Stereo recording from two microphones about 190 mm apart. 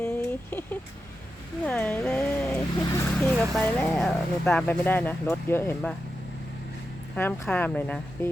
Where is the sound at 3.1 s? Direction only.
5° left (ahead or behind).